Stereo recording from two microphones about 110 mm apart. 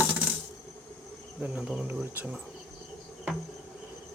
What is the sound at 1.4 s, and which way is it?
Speech, 10° right (ahead or behind).